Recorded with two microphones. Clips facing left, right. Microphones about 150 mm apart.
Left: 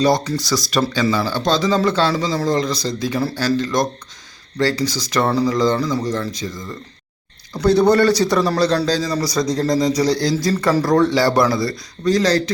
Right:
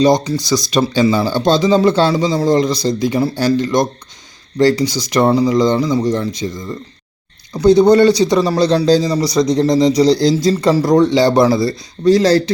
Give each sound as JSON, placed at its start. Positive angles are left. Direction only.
{"t": 0.0, "sound": "a man's voice", "side_deg": -20}